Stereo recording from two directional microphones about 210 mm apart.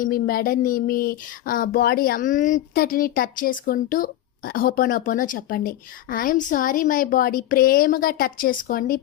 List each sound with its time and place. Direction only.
0.0 s speech: 45° left (ahead or behind)